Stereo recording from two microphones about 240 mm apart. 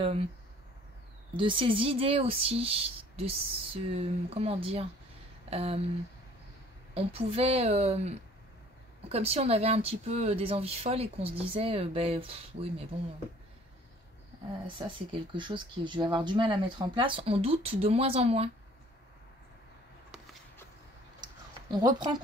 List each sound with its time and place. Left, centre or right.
1.3 s speech: right
6.9 s speech: right
14.8 s speech: centre
21.2 s a sound: centre